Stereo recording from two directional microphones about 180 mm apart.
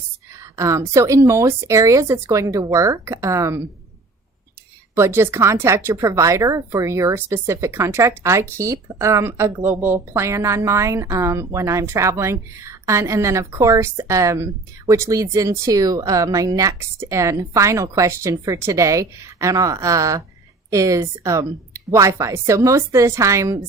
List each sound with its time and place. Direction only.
0.5 s a woman's voice: 15° right (ahead or behind)
4.9 s a woman's voice: 15° right (ahead or behind)